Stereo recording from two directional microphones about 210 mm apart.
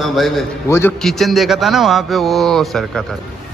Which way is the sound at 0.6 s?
10° left (ahead or behind).